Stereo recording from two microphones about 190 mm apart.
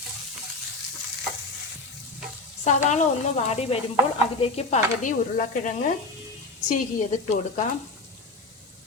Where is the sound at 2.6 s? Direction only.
40° left (ahead or behind).